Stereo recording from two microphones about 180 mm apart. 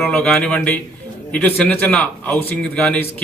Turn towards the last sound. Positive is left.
turn(degrees=5)  # may be behind; listen again after turning